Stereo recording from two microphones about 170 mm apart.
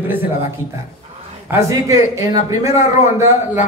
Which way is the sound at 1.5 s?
20° right (ahead or behind).